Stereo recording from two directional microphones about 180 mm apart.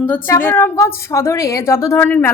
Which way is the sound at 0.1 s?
10° left (ahead or behind).